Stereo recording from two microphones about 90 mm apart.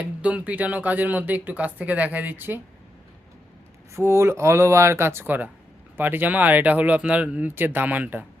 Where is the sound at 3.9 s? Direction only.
30° right (ahead or behind).